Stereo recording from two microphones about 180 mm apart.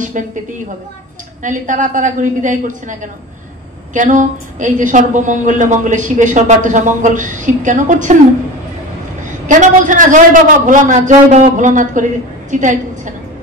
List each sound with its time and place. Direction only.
0.2 s a woman's voice: 45° right (ahead or behind)
1.4 s a woman's voice: 45° right (ahead or behind)
9.5 s a woman's voice: 45° right (ahead or behind)